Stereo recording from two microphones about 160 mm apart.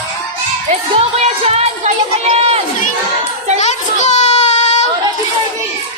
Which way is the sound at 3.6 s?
45° left (ahead or behind).